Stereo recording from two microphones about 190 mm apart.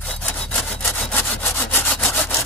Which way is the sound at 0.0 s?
10° left (ahead or behind).